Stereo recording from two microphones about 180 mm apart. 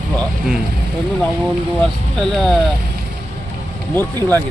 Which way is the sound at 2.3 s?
Centre (ahead or behind).